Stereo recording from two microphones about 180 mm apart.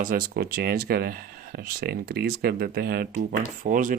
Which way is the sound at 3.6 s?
45° right (ahead or behind).